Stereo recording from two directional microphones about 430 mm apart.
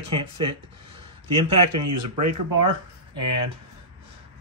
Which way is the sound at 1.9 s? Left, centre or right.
Right.